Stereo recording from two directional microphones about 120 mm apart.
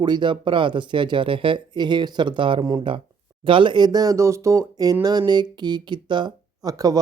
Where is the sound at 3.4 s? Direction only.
45° right (ahead or behind).